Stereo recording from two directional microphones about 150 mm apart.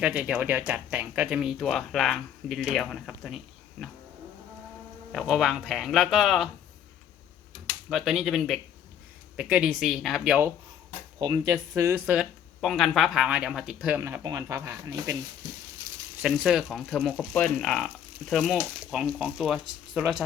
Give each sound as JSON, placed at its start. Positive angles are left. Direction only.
{"t": 0.0, "sound": "speech", "side_deg": -5}
{"t": 5.1, "sound": "speech", "side_deg": 0}
{"t": 7.9, "sound": "speech", "side_deg": 0}
{"t": 11.2, "sound": "speech", "side_deg": -25}
{"t": 14.0, "sound": "speech", "side_deg": -20}
{"t": 16.2, "sound": "speech", "side_deg": -5}